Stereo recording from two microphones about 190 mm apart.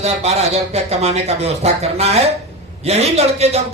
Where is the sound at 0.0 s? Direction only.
35° right (ahead or behind).